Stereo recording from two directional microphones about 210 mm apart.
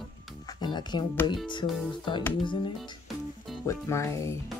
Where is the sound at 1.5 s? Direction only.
20° left (ahead or behind).